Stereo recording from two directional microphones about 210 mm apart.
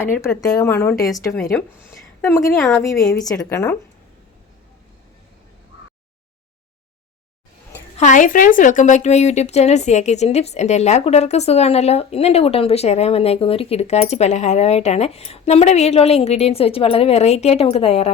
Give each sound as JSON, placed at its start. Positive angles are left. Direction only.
{"t": 0.0, "sound": "a woman's voice", "side_deg": 10}
{"t": 2.2, "sound": "a woman's voice", "side_deg": 10}
{"t": 7.9, "sound": "a woman's voice", "side_deg": 35}